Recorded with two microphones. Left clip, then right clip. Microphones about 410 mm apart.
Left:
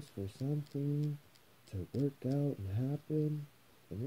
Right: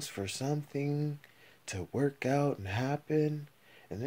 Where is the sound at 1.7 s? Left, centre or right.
Right.